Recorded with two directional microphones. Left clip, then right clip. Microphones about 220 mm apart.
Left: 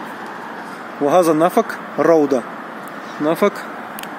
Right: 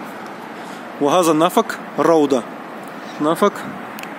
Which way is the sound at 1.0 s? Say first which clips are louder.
Left 1 dB; 5° right (ahead or behind).